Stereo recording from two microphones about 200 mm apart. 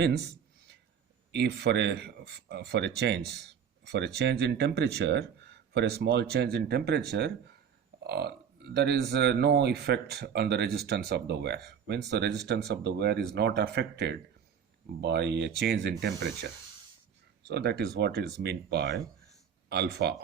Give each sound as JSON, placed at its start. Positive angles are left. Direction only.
{"t": 1.3, "sound": "speech", "side_deg": -55}
{"t": 17.5, "sound": "speech", "side_deg": -55}